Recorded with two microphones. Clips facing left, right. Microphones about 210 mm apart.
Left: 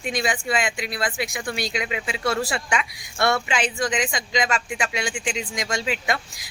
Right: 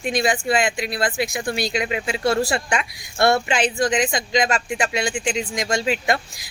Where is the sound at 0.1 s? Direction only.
35° right (ahead or behind).